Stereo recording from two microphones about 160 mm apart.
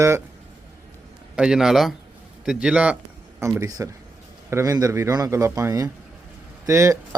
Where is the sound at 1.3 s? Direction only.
5° right (ahead or behind).